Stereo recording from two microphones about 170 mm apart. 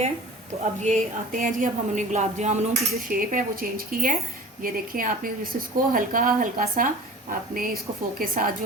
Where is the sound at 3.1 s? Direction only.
55° right (ahead or behind).